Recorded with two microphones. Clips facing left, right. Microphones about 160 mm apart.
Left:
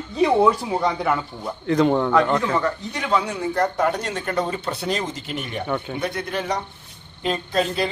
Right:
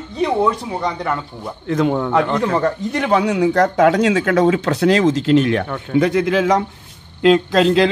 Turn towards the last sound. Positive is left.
turn(degrees=-90)